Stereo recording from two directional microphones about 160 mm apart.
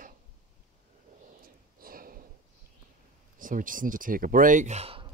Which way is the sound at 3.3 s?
55° right (ahead or behind).